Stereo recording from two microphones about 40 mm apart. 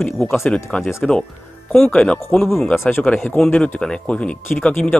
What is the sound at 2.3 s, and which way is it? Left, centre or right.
Speech, left.